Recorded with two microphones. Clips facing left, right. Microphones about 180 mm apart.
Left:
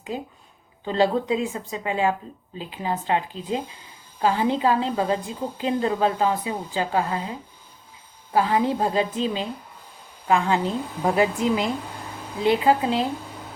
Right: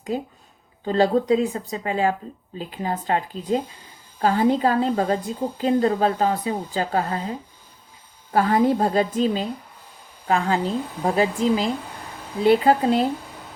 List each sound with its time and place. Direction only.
0.9 s a woman's voice: 45° right (ahead or behind)